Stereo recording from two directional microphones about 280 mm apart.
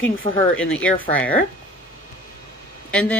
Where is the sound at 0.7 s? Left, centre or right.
Centre.